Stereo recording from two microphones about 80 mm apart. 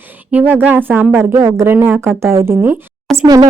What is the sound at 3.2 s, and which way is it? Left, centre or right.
Speech, right.